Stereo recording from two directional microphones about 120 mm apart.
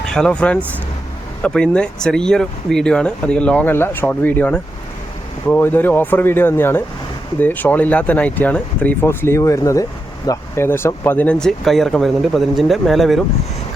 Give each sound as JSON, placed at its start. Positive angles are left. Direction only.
{"t": 0.1, "sound": "speech", "side_deg": 5}